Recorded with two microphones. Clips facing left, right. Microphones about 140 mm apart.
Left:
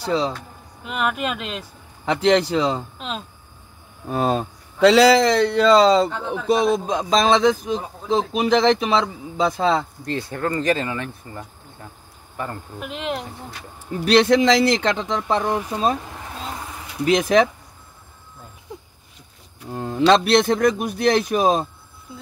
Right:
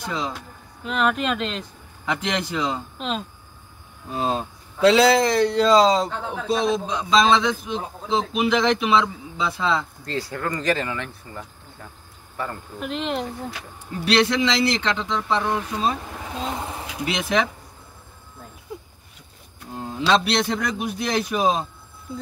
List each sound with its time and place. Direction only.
0.0 s speech: 35° left (ahead or behind)
0.8 s speech: 5° left (ahead or behind)
2.5 s speech: 30° left (ahead or behind)
3.0 s speech: centre (ahead or behind)
4.1 s a man's voice: 60° left (ahead or behind)
10.0 s speech: 25° left (ahead or behind)
12.8 s speech: 5° left (ahead or behind)
14.0 s a man's voice: 45° left (ahead or behind)
16.5 s a sound: 25° right (ahead or behind)
17.0 s a man's voice: 45° left (ahead or behind)
19.7 s a man's voice: 55° left (ahead or behind)